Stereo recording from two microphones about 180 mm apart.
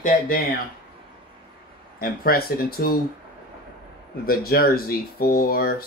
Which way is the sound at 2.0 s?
55° left (ahead or behind).